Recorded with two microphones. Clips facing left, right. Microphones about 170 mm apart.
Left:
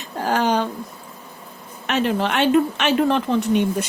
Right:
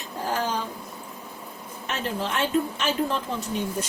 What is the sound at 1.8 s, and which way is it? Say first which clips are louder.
A woman's voice: left 9 dB; 75° left (ahead or behind).